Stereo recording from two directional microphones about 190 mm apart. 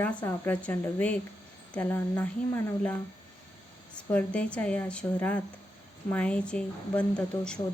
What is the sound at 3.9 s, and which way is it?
Speech, 5° left (ahead or behind).